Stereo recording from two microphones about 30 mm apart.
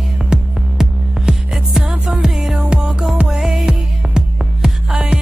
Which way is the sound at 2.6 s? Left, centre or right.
Right.